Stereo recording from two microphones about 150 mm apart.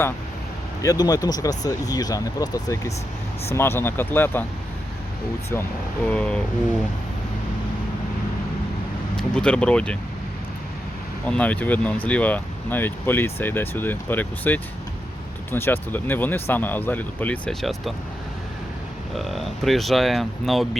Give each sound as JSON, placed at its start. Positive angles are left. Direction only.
{"t": 0.8, "sound": "speech", "side_deg": 25}
{"t": 6.1, "sound": "speech", "side_deg": 5}
{"t": 9.1, "sound": "speech", "side_deg": 5}
{"t": 11.3, "sound": "speech", "side_deg": 10}
{"t": 19.1, "sound": "speech", "side_deg": 0}